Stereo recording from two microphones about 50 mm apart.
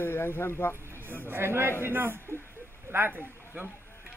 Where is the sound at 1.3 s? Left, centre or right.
Right.